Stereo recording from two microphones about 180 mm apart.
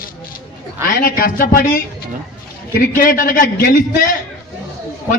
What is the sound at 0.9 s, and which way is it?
A man's voice, 50° left (ahead or behind).